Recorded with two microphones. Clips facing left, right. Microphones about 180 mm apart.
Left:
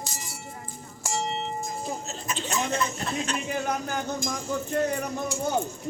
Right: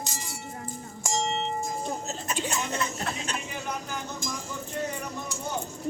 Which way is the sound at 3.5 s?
50° left (ahead or behind).